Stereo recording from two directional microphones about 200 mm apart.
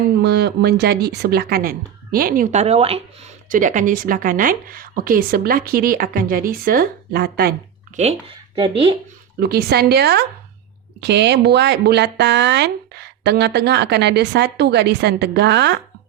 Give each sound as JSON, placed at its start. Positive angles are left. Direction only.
{"t": 0.2, "sound": "speech", "side_deg": -55}
{"t": 3.5, "sound": "speech", "side_deg": -40}
{"t": 7.9, "sound": "speech", "side_deg": -40}
{"t": 9.4, "sound": "speech", "side_deg": -50}